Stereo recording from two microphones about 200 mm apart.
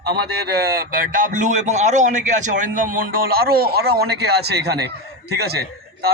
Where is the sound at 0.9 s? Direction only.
40° right (ahead or behind).